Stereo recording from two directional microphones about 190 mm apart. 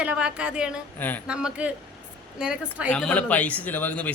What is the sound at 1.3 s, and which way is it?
A woman's voice, 5° right (ahead or behind).